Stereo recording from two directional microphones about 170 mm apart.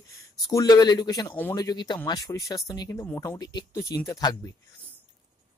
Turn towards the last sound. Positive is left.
turn(degrees=20)  # may be behind; listen again after turning